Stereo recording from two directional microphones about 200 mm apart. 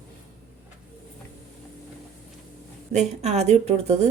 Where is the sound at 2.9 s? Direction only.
35° right (ahead or behind).